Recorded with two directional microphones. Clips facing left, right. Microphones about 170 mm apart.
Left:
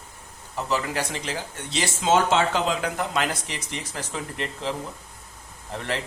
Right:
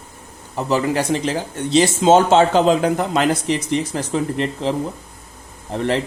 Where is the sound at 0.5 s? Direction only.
25° right (ahead or behind).